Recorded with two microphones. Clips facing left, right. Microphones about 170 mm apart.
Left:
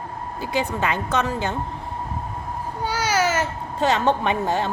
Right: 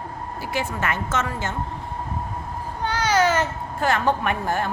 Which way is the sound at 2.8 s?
10° left (ahead or behind).